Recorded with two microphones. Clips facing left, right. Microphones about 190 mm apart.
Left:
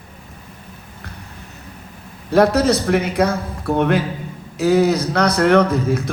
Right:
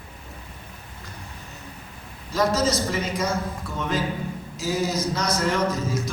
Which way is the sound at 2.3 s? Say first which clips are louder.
Left 8 dB; 60° left (ahead or behind).